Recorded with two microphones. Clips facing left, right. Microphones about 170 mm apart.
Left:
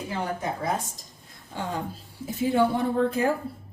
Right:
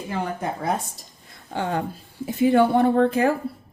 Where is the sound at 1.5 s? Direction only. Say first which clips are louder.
Right 6 dB; 70° right (ahead or behind).